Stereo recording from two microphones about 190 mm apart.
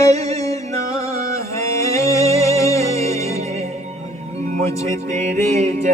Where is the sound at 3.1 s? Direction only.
35° right (ahead or behind).